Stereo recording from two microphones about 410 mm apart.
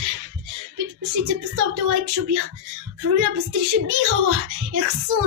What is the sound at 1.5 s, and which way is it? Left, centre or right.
A child's voice, right.